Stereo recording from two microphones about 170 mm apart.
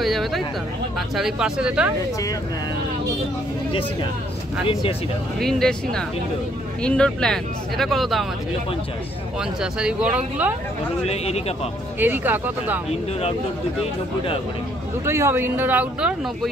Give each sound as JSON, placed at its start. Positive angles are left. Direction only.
{"t": 0.0, "sound": "a sound", "side_deg": 0}
{"t": 0.9, "sound": "speech", "side_deg": 0}
{"t": 5.4, "sound": "speech", "side_deg": 5}
{"t": 9.4, "sound": "speech", "side_deg": -5}
{"t": 11.1, "sound": "speech", "side_deg": 40}
{"t": 12.0, "sound": "speech", "side_deg": -10}
{"t": 15.0, "sound": "speech", "side_deg": -15}